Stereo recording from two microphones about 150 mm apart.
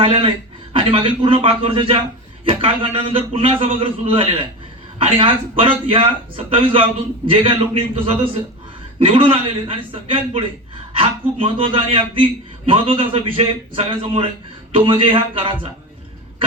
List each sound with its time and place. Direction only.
0.0 s a man's voice: 40° right (ahead or behind)